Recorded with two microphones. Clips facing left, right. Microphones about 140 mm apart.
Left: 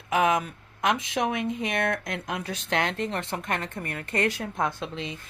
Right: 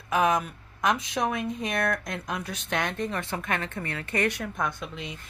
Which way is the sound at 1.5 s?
25° left (ahead or behind).